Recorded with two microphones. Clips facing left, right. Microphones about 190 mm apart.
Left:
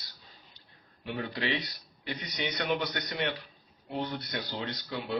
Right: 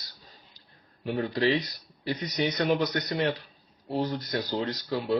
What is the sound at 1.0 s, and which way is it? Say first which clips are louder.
Speech: right 8 dB; 40° right (ahead or behind).